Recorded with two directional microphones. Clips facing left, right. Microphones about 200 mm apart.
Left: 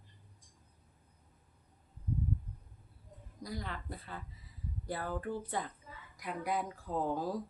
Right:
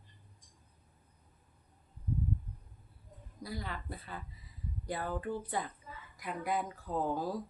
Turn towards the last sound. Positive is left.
turn(degrees=0)  # may be behind; listen again after turning